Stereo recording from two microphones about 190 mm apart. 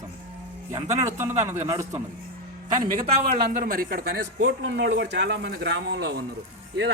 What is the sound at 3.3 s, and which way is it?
A man's voice, 50° right (ahead or behind).